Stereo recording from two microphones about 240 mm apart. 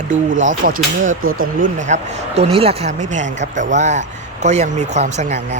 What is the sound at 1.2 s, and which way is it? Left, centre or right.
Speech, right.